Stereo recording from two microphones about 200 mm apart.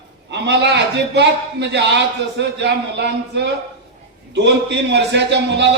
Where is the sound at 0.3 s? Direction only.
60° right (ahead or behind).